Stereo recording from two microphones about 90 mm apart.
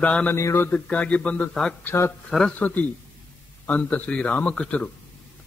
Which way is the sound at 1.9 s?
25° left (ahead or behind).